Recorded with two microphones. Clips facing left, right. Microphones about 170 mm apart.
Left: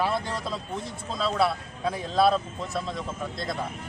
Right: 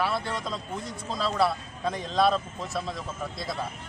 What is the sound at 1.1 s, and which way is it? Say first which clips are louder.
Speech: left 1 dB; centre (ahead or behind).